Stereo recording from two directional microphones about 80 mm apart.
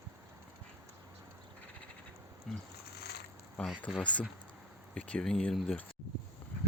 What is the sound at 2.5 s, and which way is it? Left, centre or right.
Speech, centre.